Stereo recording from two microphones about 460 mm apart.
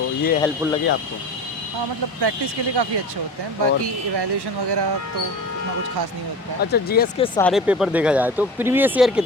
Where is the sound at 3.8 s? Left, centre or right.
Right.